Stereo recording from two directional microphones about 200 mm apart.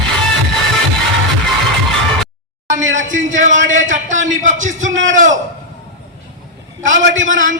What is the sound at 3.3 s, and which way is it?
A man's voice, 40° right (ahead or behind).